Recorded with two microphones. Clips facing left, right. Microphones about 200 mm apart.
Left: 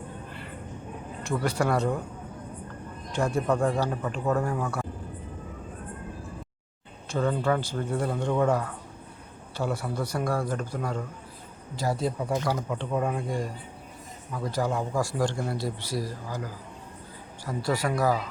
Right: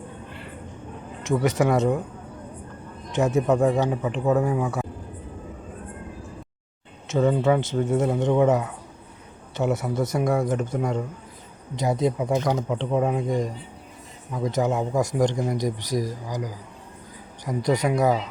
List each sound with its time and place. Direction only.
1.2 s speech: 15° right (ahead or behind)
3.5 s speech: 5° right (ahead or behind)
7.4 s speech: 20° right (ahead or behind)
9.7 s speech: 20° right (ahead or behind)